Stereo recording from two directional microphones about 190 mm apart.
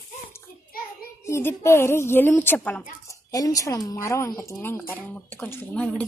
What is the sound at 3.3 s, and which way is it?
A woman's voice, 20° left (ahead or behind).